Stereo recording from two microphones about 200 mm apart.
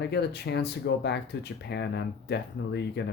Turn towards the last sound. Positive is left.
turn(degrees=55)  # may be behind; listen again after turning